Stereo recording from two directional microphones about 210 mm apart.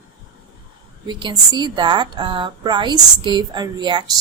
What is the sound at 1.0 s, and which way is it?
A woman's voice, 20° right (ahead or behind).